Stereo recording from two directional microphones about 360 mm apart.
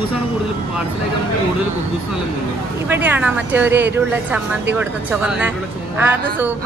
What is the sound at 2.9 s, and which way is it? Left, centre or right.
A woman's voice, centre.